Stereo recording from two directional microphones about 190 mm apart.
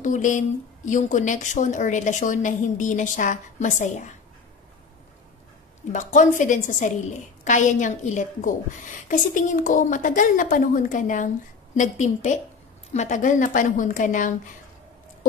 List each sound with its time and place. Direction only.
0.0 s a woman's voice: 40° left (ahead or behind)
5.9 s a woman's voice: 40° left (ahead or behind)